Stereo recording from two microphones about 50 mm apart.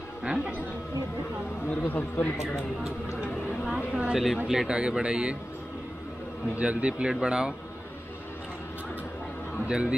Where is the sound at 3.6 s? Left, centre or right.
Right.